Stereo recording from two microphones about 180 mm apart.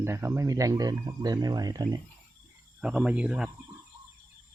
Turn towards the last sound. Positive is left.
turn(degrees=-5)  # may be behind; listen again after turning